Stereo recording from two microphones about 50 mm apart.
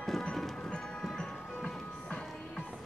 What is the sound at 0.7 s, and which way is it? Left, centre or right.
Music, centre.